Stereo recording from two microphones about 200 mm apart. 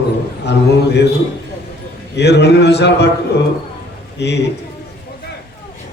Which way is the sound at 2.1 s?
55° left (ahead or behind).